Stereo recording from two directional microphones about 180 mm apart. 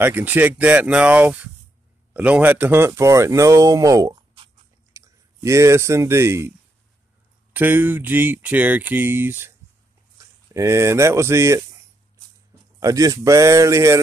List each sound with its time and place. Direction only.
0.0 s speech: 10° right (ahead or behind)
7.5 s speech: 10° right (ahead or behind)
12.8 s speech: 20° right (ahead or behind)